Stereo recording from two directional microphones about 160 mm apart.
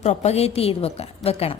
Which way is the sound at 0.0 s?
45° left (ahead or behind).